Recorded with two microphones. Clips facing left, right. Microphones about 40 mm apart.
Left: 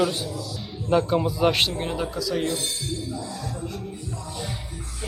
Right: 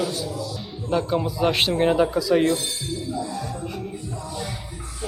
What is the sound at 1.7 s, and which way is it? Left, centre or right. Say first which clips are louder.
Speech: right 9 dB; right.